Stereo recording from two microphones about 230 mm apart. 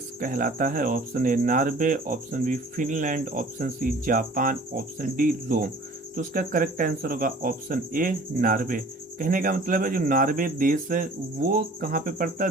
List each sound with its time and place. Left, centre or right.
0.2 s speech: right